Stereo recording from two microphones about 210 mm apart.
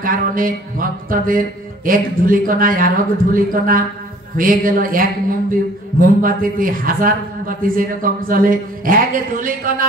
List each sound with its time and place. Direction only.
0.0 s speech: 40° right (ahead or behind)